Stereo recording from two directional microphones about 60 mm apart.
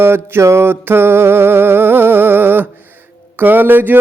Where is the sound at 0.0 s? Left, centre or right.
Right.